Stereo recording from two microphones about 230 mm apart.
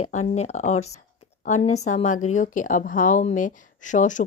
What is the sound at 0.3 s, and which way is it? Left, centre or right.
A woman's voice, left.